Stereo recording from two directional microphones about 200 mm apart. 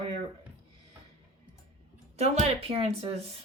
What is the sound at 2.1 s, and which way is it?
A woman's voice, 35° right (ahead or behind).